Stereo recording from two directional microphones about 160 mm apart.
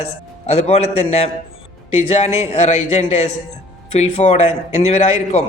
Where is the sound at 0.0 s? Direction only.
40° left (ahead or behind).